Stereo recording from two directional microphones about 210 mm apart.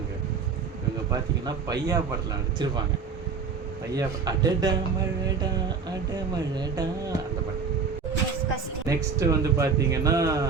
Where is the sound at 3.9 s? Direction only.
15° right (ahead or behind).